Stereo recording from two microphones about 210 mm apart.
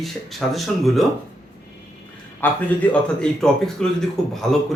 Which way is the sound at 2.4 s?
5° left (ahead or behind).